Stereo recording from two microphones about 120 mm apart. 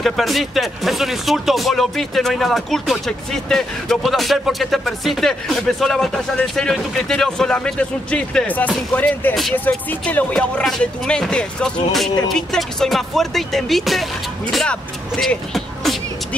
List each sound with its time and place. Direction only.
0.0 s speech: centre (ahead or behind)